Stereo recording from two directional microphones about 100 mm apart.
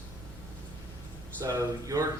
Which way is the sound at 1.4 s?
35° right (ahead or behind).